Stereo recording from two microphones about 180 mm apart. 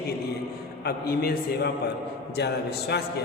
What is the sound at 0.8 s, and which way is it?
A man's voice, 60° left (ahead or behind).